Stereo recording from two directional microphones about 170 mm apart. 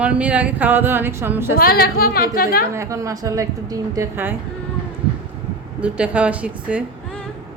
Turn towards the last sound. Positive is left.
turn(degrees=-5)  # may be behind; listen again after turning